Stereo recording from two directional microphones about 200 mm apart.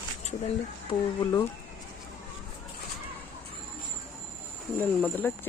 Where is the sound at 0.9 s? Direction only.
15° left (ahead or behind).